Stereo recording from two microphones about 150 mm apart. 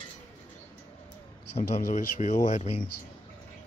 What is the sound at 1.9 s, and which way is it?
Speech, 55° left (ahead or behind).